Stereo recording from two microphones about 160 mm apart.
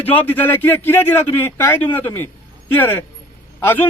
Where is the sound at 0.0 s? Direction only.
10° left (ahead or behind).